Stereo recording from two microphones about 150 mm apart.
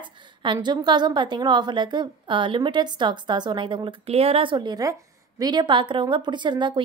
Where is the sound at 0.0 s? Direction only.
30° right (ahead or behind).